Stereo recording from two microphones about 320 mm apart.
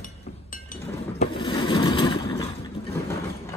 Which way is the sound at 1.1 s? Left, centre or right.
Centre.